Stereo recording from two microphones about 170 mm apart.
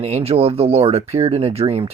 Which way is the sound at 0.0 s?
35° right (ahead or behind).